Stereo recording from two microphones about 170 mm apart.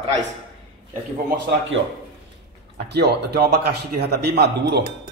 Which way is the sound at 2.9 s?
70° right (ahead or behind).